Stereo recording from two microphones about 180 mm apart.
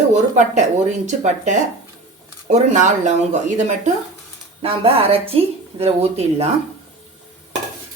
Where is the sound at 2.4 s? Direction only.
40° right (ahead or behind).